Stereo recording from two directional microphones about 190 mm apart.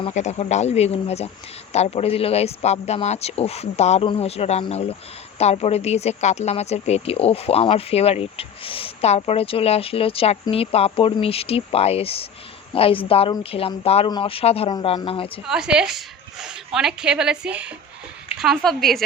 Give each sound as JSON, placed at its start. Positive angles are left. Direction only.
{"t": 0.0, "sound": "speech", "side_deg": 35}
{"t": 15.4, "sound": "speech", "side_deg": -5}